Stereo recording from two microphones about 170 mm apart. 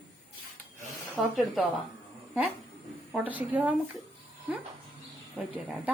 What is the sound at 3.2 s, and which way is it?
Speech, 10° right (ahead or behind).